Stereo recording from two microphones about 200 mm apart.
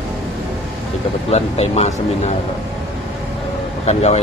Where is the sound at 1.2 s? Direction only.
35° left (ahead or behind).